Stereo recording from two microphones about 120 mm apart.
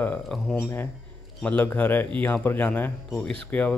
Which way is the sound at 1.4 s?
15° left (ahead or behind).